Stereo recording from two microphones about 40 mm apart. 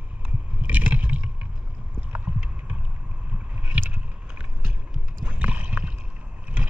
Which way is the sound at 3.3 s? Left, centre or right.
Right.